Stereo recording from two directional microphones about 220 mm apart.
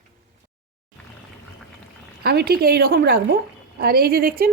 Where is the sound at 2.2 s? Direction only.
45° right (ahead or behind).